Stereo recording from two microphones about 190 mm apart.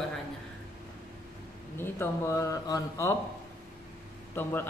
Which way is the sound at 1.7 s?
15° left (ahead or behind).